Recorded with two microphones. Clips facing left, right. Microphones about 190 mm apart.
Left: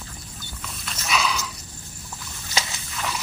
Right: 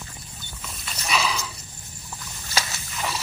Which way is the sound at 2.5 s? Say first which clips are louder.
Even; 20° left (ahead or behind).